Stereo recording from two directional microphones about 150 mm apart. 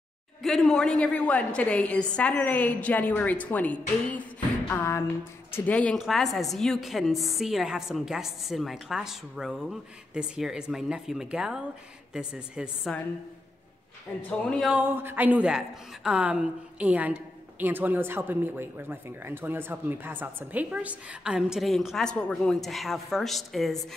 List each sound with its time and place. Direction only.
0.4 s a woman's voice: centre (ahead or behind)
14.6 s a woman's voice: 10° right (ahead or behind)